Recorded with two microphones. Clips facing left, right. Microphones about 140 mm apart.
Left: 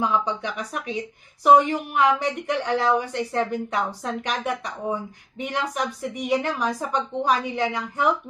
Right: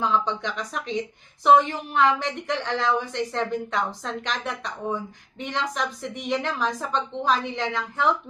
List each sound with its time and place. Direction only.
0.0 s a woman's voice: 10° left (ahead or behind)